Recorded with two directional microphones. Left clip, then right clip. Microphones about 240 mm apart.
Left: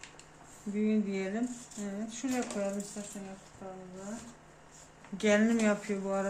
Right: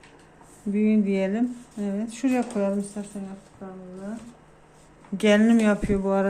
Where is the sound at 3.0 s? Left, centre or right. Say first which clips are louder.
Right 7 dB; right.